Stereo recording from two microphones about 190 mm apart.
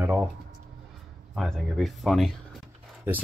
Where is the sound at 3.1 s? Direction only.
10° right (ahead or behind).